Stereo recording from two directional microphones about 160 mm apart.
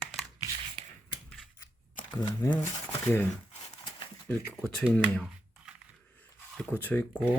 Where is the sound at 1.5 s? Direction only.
25° left (ahead or behind).